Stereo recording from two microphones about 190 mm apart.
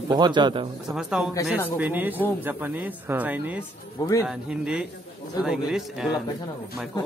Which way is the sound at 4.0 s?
15° left (ahead or behind).